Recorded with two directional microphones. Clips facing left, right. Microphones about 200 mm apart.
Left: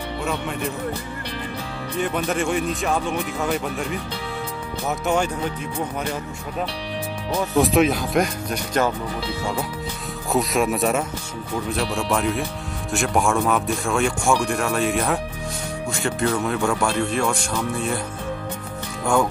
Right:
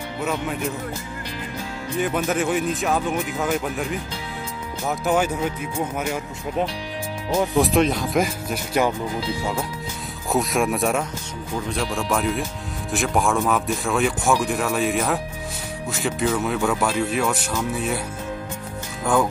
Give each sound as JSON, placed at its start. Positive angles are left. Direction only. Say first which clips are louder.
{"t": 0.2, "sound": "speech", "louder": "right 3 dB", "side_deg": -5}
{"t": 2.0, "sound": "speech", "louder": "right 1 dB", "side_deg": -5}
{"t": 7.5, "sound": "speech", "louder": "left 3 dB", "side_deg": 0}